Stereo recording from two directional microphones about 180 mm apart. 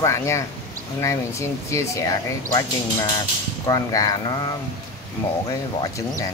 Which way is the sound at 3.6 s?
20° left (ahead or behind).